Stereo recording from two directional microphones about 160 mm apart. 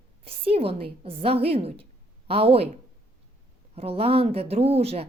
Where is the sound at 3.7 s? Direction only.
40° right (ahead or behind).